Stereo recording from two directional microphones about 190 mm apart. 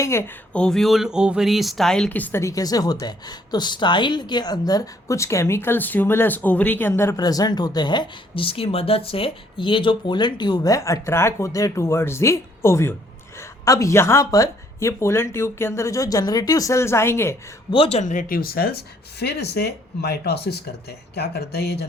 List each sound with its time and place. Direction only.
0.0 s speech: 15° left (ahead or behind)
17.7 s speech: 30° left (ahead or behind); by 21.8 s 60° left (ahead or behind)